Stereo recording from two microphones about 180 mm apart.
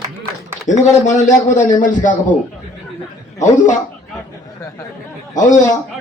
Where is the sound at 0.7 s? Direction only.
45° left (ahead or behind).